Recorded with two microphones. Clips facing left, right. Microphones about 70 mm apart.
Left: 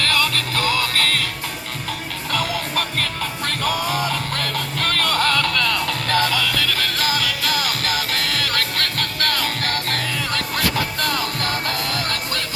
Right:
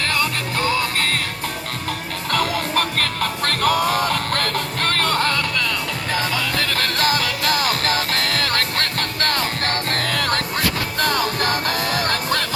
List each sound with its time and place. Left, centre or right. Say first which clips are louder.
0.0 s music: left 1 dB; right
2.3 s music: right 3 dB; right
10.0 s music: right 3 dB; right
11.5 s music: right 2 dB; centre